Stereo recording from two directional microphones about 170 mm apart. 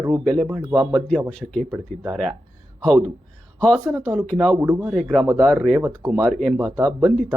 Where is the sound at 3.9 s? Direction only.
15° right (ahead or behind).